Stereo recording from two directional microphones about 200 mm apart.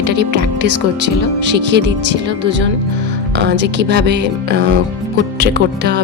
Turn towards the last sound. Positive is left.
turn(degrees=-55)  # may be behind; listen again after turning